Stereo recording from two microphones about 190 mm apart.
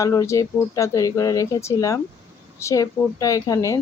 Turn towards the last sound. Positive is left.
turn(degrees=15)  # may be behind; listen again after turning